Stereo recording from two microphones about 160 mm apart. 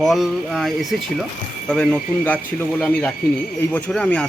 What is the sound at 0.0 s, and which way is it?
Speech, centre (ahead or behind).